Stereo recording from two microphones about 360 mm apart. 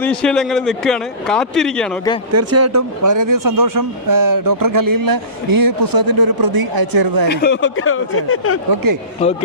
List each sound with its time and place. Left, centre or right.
0.0 s speech: centre
2.3 s speech: right
7.3 s speech: left
8.7 s speech: right